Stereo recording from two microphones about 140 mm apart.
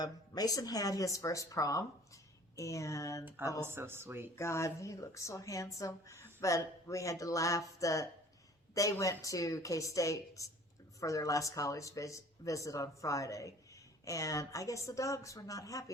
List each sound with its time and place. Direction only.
0.0 s speech: 25° left (ahead or behind)
3.6 s speech: 15° right (ahead or behind)
4.4 s speech: 20° left (ahead or behind)